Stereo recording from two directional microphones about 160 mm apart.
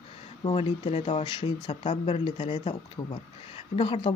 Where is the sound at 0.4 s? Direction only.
30° left (ahead or behind).